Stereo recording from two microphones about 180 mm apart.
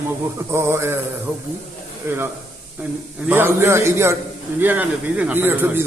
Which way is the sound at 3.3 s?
15° right (ahead or behind).